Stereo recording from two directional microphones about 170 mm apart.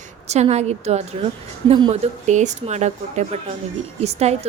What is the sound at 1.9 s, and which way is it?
A woman's voice, 40° right (ahead or behind).